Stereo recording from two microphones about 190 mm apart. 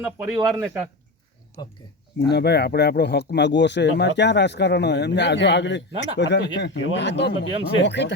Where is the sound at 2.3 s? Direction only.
60° left (ahead or behind).